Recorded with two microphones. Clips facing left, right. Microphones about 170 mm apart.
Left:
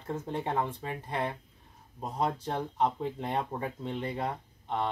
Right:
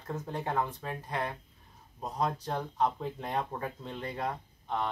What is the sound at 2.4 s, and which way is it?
Speech, 25° left (ahead or behind).